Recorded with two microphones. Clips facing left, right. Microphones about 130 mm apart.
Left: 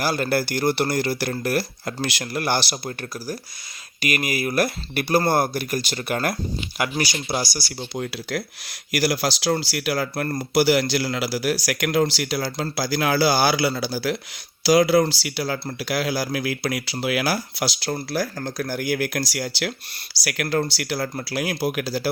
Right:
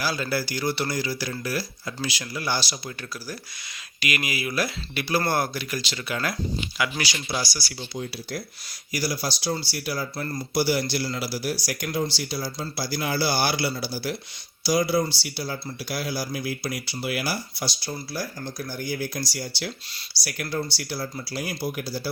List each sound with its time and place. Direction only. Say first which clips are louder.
0.0 s speech: left 5 dB; 55° left (ahead or behind)
4.0 s speech: left 4 dB; 45° left (ahead or behind); by 22.1 s 90° left